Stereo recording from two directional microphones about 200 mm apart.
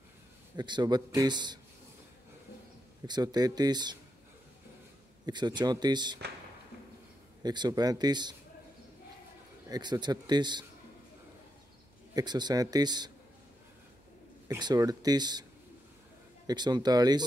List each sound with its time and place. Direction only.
0.6 s a man's voice: 20° right (ahead or behind)
3.1 s a man's voice: 20° right (ahead or behind)
5.2 s a man's voice: 20° right (ahead or behind)
7.4 s a man's voice: 20° right (ahead or behind)
9.7 s a man's voice: 20° right (ahead or behind)
12.1 s a man's voice: 20° right (ahead or behind)
14.5 s a man's voice: 20° right (ahead or behind)
16.4 s a man's voice: 20° right (ahead or behind)